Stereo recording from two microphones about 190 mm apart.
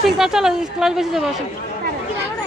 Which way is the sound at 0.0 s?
Centre (ahead or behind).